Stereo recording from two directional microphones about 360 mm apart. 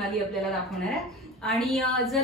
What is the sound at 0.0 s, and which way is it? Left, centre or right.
A woman's voice, centre.